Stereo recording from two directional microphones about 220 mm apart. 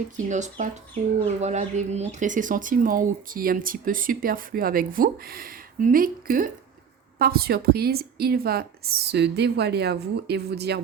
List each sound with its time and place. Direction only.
0.2 s a woman's voice: 35° right (ahead or behind)